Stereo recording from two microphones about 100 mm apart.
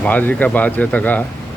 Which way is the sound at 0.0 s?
15° left (ahead or behind).